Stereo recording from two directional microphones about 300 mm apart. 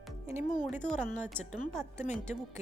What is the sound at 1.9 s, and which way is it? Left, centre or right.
Speech, left.